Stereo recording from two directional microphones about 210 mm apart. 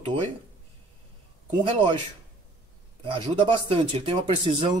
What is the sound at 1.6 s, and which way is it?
Speech, 25° right (ahead or behind).